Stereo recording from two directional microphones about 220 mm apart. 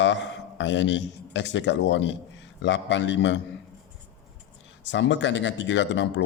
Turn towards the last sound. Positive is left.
turn(degrees=55)  # may be behind; listen again after turning